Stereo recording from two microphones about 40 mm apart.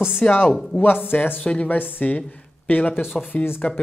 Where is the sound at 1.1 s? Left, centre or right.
Left.